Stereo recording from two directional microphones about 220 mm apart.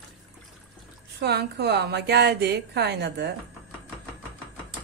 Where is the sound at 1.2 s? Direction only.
50° right (ahead or behind).